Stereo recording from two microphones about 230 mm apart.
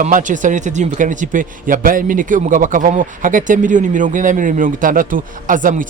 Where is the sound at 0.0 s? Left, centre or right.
Right.